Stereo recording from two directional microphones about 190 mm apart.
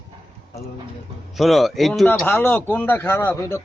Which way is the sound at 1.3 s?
Centre (ahead or behind).